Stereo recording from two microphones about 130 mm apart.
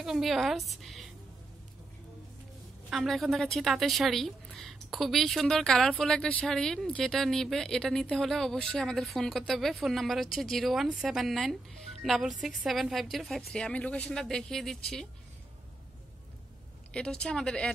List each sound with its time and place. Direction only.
0.0 s a woman's voice: centre (ahead or behind)
0.7 s music: centre (ahead or behind)
2.9 s a woman's voice: centre (ahead or behind)
16.9 s speech: 5° left (ahead or behind)